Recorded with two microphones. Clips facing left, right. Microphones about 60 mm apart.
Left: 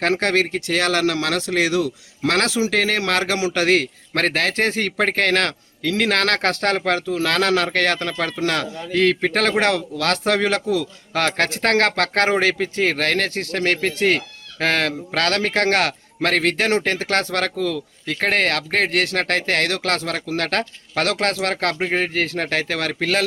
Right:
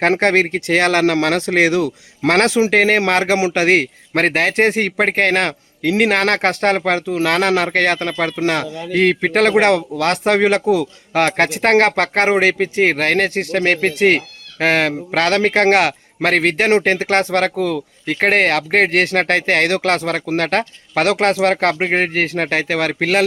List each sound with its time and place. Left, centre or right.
0.0 s speech: right